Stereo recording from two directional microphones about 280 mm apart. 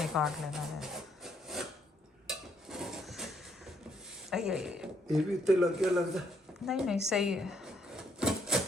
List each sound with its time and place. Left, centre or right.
0.0 s a sound: centre
4.3 s speech: centre
6.7 s drawer open or close: centre